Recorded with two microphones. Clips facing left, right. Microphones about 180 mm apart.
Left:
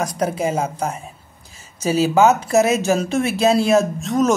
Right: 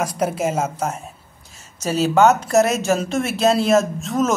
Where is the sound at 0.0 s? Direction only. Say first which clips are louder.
Even; centre (ahead or behind).